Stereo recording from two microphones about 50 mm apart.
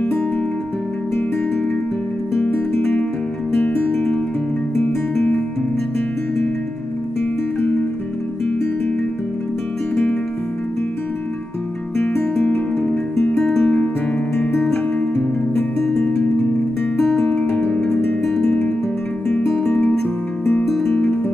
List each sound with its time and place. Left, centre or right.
3.6 s music: left
12.4 s music: left
13.4 s music: centre
13.7 s music: left
14.6 s music: centre
17.1 s music: centre
17.7 s music: centre
18.2 s guitar: centre
20.6 s music: centre
20.9 s music: left